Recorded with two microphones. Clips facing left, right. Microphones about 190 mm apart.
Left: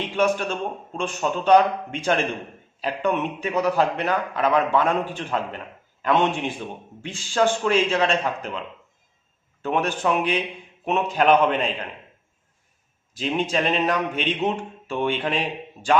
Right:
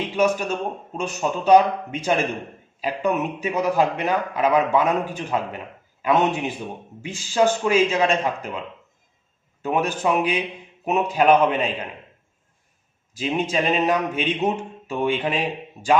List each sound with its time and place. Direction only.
0.2 s a man's voice: 10° right (ahead or behind)
9.6 s a man's voice: 10° right (ahead or behind)
13.1 s a man's voice: 10° right (ahead or behind)